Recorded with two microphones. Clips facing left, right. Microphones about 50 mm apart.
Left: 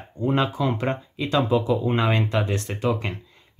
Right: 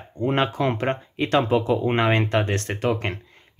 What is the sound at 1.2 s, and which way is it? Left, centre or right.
Speech, right.